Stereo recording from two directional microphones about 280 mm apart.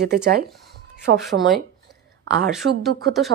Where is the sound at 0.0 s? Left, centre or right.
Right.